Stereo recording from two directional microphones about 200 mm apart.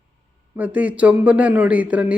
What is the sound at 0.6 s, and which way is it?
Speech, 10° right (ahead or behind).